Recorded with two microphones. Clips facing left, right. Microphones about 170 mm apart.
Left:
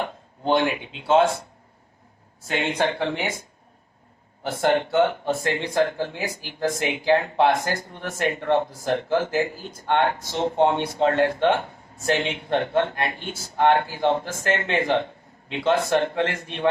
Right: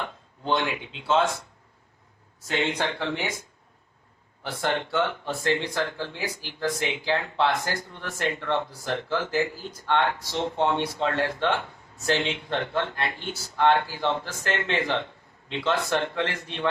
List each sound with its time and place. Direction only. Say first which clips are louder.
0.0 s speech: left 6 dB; 50° left (ahead or behind)
2.5 s speech: left 3 dB; 50° left (ahead or behind)
4.4 s speech: left 7 dB; 50° left (ahead or behind)